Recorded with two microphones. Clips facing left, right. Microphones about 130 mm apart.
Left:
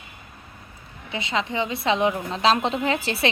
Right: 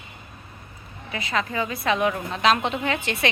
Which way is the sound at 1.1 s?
25° left (ahead or behind).